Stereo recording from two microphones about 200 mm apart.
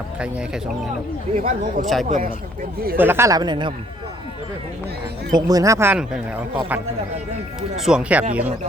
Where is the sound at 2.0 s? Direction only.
35° right (ahead or behind).